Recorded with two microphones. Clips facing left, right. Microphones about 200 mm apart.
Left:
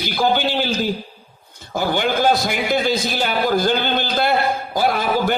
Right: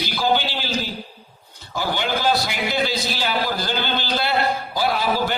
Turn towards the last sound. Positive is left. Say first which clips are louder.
# left 3 dB
turn(degrees=50)  # may be behind; listen again after turning